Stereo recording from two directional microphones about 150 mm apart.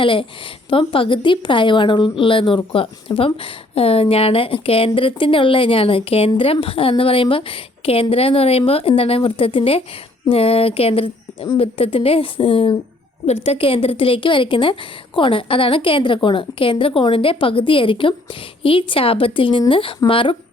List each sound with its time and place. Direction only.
0.0 s a woman's voice: 35° left (ahead or behind)